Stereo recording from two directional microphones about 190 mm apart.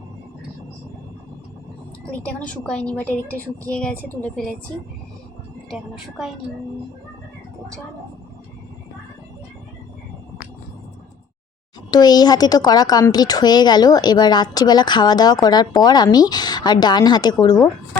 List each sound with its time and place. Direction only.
2.0 s a woman's voice: 5° left (ahead or behind)
5.7 s a woman's voice: centre (ahead or behind)
11.9 s a woman's voice: 20° left (ahead or behind)